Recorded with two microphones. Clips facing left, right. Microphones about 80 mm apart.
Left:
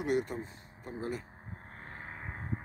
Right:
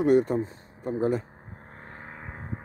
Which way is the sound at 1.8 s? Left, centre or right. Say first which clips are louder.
Right 2 dB; right.